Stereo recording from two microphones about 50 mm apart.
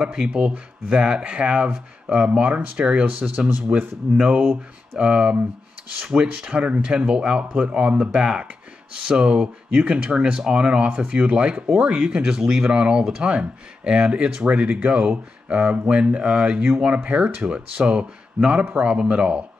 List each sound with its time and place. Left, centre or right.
0.0 s speech: centre